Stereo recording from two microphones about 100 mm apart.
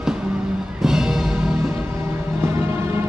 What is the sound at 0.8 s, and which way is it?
Music, 5° right (ahead or behind).